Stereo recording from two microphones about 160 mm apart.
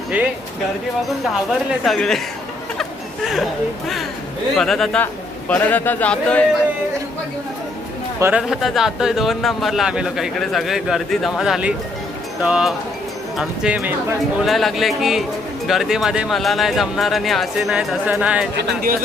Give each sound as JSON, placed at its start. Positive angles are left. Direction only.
{"t": 0.1, "sound": "speech", "side_deg": -10}
{"t": 1.8, "sound": "speech", "side_deg": 0}
{"t": 4.5, "sound": "speech", "side_deg": 0}
{"t": 8.2, "sound": "speech", "side_deg": -5}
{"t": 18.5, "sound": "speech", "side_deg": -70}